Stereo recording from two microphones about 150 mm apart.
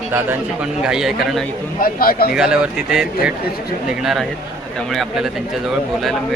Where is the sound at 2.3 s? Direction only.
5° right (ahead or behind).